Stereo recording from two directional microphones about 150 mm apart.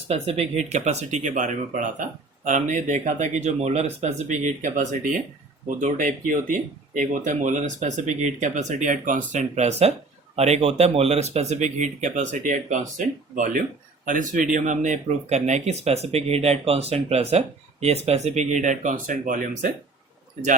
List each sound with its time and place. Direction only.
0.1 s speech: 40° right (ahead or behind); by 19.7 s 60° right (ahead or behind)